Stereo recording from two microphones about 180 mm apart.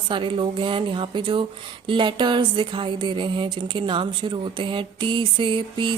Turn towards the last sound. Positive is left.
turn(degrees=-25)  # may be behind; listen again after turning